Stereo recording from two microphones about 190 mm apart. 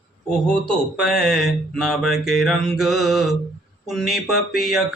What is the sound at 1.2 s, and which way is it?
Mantra, centre (ahead or behind).